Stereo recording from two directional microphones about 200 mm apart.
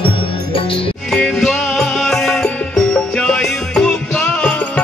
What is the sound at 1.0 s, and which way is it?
Music, 5° left (ahead or behind).